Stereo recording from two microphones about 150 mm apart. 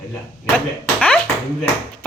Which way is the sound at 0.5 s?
10° left (ahead or behind).